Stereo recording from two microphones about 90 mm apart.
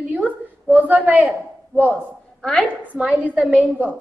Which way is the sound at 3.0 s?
15° right (ahead or behind).